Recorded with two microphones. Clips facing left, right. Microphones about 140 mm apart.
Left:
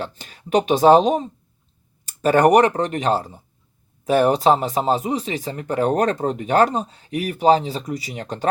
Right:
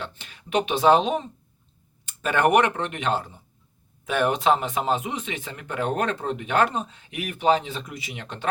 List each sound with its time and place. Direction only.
0.0 s speech: 40° left (ahead or behind)